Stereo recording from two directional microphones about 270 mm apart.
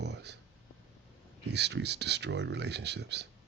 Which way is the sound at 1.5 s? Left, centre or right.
Right.